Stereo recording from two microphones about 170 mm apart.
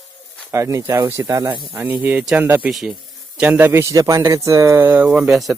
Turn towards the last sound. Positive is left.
turn(degrees=0)  # may be behind; listen again after turning